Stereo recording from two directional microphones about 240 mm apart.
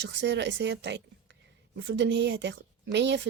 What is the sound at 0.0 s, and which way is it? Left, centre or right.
A woman's voice, right.